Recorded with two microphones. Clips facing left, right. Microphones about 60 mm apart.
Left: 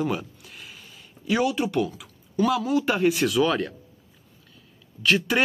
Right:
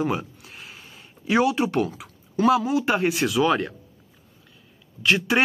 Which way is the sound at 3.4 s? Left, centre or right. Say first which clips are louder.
Right 2 dB; right.